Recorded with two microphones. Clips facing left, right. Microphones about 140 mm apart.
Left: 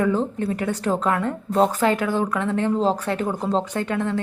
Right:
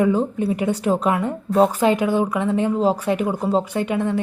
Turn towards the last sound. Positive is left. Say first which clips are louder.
# right 3 dB
turn(degrees=-15)  # may be behind; listen again after turning